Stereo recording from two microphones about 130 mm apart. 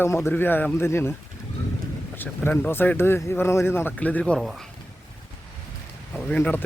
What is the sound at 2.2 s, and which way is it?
Speech, 10° left (ahead or behind).